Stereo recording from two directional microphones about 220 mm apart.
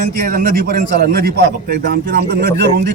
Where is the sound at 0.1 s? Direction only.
40° right (ahead or behind).